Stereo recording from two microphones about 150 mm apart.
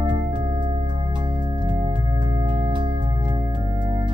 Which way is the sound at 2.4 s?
35° right (ahead or behind).